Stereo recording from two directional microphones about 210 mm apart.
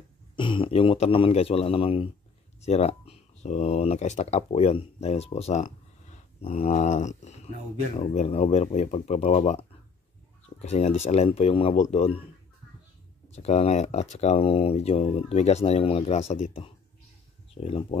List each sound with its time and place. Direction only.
0.4 s speech: 25° left (ahead or behind)
13.3 s speech: 30° left (ahead or behind)